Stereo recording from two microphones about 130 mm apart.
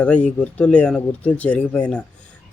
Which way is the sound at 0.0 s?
10° left (ahead or behind).